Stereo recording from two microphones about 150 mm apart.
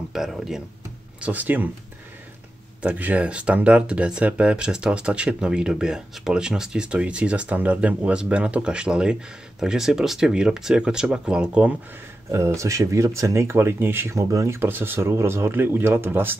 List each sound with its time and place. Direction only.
0.1 s speech: 5° right (ahead or behind)
2.8 s speech: 10° right (ahead or behind)
12.3 s speech: 20° right (ahead or behind)